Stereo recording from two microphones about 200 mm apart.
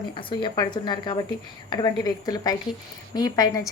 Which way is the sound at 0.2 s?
25° left (ahead or behind).